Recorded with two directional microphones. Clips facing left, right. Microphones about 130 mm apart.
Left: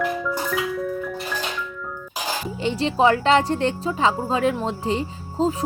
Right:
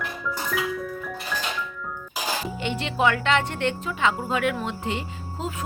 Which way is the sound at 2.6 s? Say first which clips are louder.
Left 7 dB; 35° left (ahead or behind).